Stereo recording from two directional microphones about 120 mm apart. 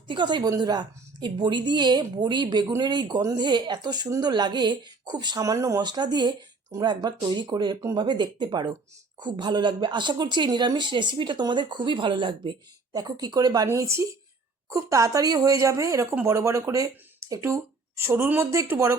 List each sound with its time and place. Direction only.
0.1 s a woman's voice: 40° right (ahead or behind)
13.7 s speech: 25° right (ahead or behind)